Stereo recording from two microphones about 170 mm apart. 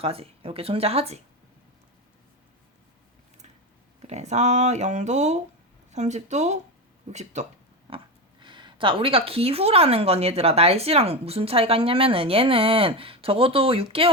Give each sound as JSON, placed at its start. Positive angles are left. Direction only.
{"t": 0.0, "sound": "speech", "side_deg": -35}
{"t": 4.0, "sound": "speech", "side_deg": -40}
{"t": 7.9, "sound": "speech", "side_deg": -30}